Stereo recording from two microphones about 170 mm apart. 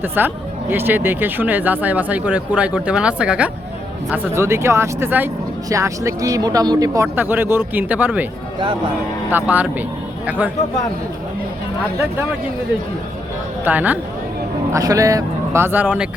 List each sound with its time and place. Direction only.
0.2 s speech: 10° right (ahead or behind)
9.3 s speech: 10° right (ahead or behind)
13.7 s speech: 10° right (ahead or behind)
14.7 s speech: 20° right (ahead or behind)